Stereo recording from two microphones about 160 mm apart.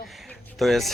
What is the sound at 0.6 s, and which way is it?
Speech, centre (ahead or behind).